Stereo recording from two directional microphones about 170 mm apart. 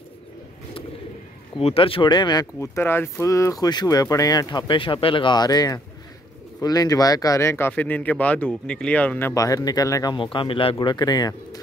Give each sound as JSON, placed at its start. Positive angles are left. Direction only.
{"t": 1.6, "sound": "speech", "side_deg": 35}
{"t": 9.3, "sound": "speech", "side_deg": 20}